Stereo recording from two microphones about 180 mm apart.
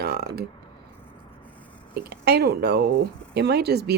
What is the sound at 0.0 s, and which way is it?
Burping, 60° right (ahead or behind).